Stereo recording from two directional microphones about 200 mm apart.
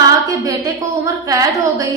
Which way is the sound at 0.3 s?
15° right (ahead or behind).